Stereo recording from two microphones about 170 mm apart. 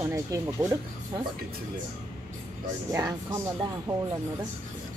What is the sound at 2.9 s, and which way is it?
Speech, 20° right (ahead or behind).